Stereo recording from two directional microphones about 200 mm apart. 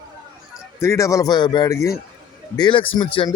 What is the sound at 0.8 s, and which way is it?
Speech, 15° left (ahead or behind).